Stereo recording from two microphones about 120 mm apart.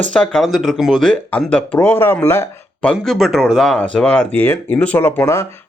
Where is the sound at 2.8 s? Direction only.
5° left (ahead or behind).